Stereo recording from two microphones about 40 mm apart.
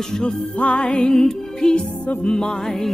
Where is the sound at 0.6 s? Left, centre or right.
Left.